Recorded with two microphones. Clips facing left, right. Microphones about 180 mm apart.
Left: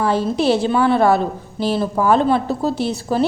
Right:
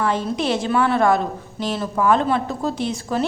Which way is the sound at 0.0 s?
35° left (ahead or behind).